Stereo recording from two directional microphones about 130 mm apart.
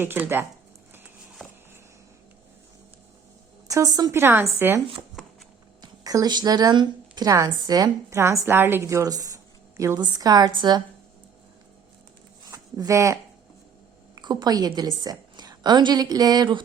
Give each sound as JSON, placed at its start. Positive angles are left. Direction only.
{"t": 0.0, "sound": "a woman's voice", "side_deg": -15}
{"t": 3.7, "sound": "a woman's voice", "side_deg": -25}
{"t": 4.1, "sound": "a woman's voice", "side_deg": -15}
{"t": 5.8, "sound": "a woman's voice", "side_deg": -30}
{"t": 12.5, "sound": "a sound", "side_deg": -25}
{"t": 14.2, "sound": "a woman's voice", "side_deg": -35}